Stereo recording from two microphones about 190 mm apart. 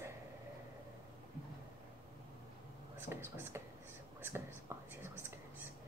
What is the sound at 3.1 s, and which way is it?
Speech, 15° right (ahead or behind).